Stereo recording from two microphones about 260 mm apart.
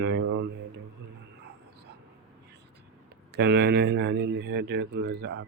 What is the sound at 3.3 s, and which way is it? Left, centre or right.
Speech, right.